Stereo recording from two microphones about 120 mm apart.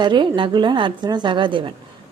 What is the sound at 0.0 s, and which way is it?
A woman's voice, 40° right (ahead or behind).